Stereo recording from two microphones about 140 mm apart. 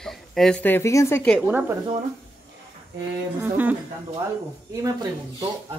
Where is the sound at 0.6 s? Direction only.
15° left (ahead or behind).